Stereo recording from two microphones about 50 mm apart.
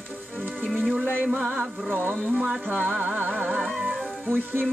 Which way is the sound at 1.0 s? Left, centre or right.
Left.